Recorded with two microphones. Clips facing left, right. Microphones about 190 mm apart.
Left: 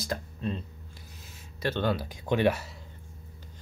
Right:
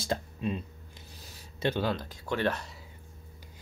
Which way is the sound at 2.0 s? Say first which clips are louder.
Left 5 dB; 15° left (ahead or behind).